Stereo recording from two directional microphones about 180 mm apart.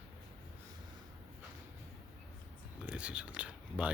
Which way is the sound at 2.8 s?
5° right (ahead or behind).